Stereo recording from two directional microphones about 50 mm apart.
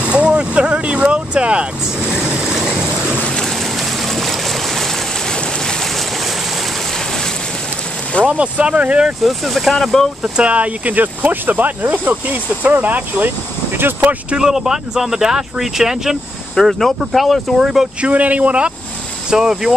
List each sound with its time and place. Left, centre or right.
0.0 s vehicle: right
2.1 s stream: centre
3.3 s stream: centre
7.0 s a sound: centre
8.3 s speech: right
9.2 s speech: centre
10.2 s speech: right
14.3 s speech: centre
16.5 s speech: centre
17.6 s speech: centre
18.0 s speech: right
19.3 s speech: centre